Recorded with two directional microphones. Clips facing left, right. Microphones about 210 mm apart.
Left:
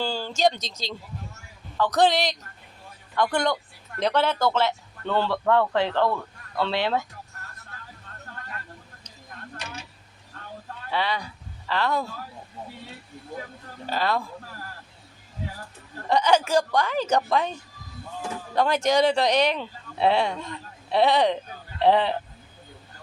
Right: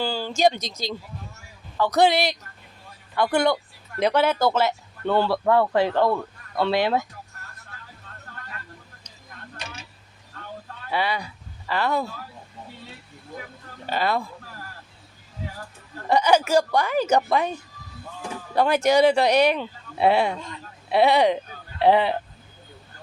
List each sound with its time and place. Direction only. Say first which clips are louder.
0.0 s speech: right 2 dB; 5° right (ahead or behind)
10.9 s speech: right 2 dB; 10° right (ahead or behind)
13.9 s speech: right 1 dB; 10° right (ahead or behind)
16.0 s speech: right 2 dB; 10° right (ahead or behind)
18.5 s speech: right 3 dB; 10° right (ahead or behind)